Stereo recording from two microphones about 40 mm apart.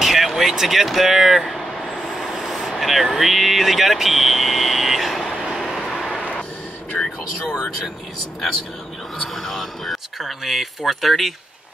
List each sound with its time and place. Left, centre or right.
0.0 s speech: centre
2.0 s vehicle: centre
6.9 s vehicle: centre
9.3 s speech: centre